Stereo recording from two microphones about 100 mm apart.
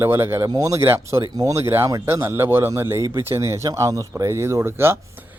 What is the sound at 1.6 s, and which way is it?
Speech, 25° right (ahead or behind).